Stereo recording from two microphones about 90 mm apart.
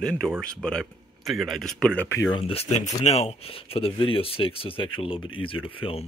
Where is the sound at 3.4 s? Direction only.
90° left.